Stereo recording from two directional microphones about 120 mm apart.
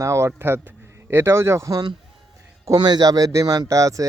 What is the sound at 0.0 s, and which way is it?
Speech, 25° right (ahead or behind).